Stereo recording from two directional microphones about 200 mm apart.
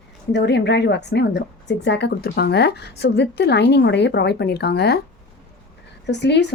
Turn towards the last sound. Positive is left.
turn(degrees=60)  # may be behind; listen again after turning